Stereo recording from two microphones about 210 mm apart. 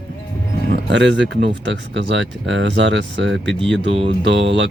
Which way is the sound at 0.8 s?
55° right (ahead or behind).